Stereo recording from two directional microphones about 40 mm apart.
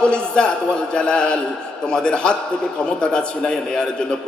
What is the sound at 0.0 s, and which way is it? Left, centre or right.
A man's voice, left.